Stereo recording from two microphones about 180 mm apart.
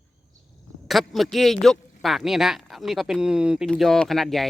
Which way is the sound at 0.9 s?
Centre (ahead or behind).